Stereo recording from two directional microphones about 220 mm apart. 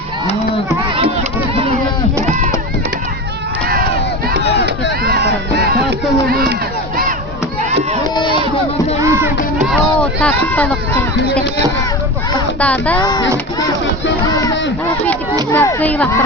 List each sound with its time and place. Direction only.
6.3 s crowd: 45° right (ahead or behind)
8.1 s a sound: 20° left (ahead or behind)
9.0 s music: 15° right (ahead or behind)
9.6 s a sound: 5° left (ahead or behind)
12.5 s child singing: 5° left (ahead or behind)
13.0 s speech: 20° left (ahead or behind)
15.5 s speech: 10° left (ahead or behind)